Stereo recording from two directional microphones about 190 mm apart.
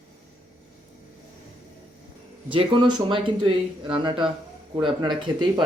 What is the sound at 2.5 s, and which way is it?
Speech, 25° right (ahead or behind).